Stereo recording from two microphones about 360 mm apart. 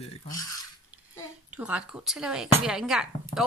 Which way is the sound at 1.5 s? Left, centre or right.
Centre.